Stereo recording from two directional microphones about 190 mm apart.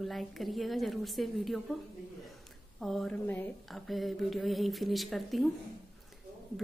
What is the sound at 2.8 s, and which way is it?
A woman's voice, centre (ahead or behind).